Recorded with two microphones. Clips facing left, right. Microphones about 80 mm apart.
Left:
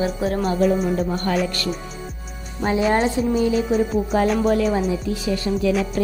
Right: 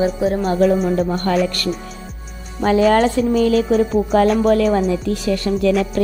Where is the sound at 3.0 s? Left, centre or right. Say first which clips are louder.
Right 4 dB; right.